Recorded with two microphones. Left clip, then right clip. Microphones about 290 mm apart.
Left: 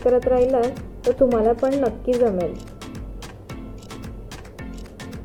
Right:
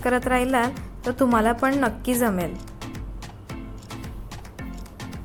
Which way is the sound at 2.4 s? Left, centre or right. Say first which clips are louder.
Left 4 dB; centre.